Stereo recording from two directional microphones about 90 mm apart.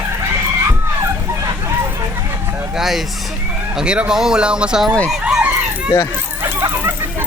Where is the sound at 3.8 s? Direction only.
10° right (ahead or behind).